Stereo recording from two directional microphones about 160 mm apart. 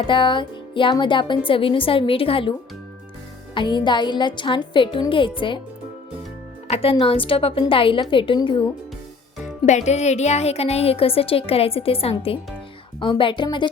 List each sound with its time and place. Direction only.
0.0 s a woman's voice: 30° left (ahead or behind)
3.5 s a woman's voice: 30° left (ahead or behind)
6.7 s a woman's voice: 40° left (ahead or behind)
9.6 s a woman's voice: 45° left (ahead or behind); by 13.7 s 30° left (ahead or behind)